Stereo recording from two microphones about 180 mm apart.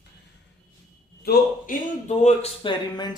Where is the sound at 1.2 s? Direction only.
45° left (ahead or behind); by 3.1 s 25° left (ahead or behind).